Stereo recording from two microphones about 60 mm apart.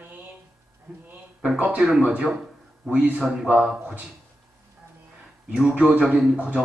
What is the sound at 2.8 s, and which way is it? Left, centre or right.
A man's voice, centre.